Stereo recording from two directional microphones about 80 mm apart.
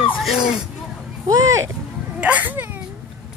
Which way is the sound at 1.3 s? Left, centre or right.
Right.